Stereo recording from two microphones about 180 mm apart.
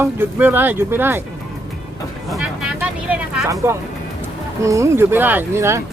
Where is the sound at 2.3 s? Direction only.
5° right (ahead or behind).